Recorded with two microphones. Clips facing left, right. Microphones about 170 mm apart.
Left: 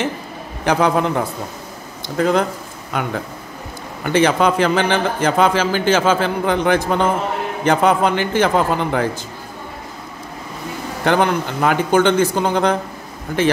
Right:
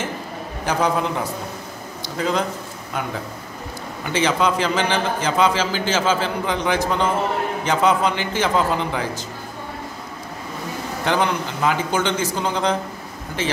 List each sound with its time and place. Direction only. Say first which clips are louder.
0.7 s a man's voice: left 5 dB; 65° left (ahead or behind)
2.9 s speech: left 4 dB; 65° left (ahead or behind)
4.0 s a man's voice: left 5 dB; 55° left (ahead or behind)
11.1 s a man's voice: left 5 dB; 55° left (ahead or behind)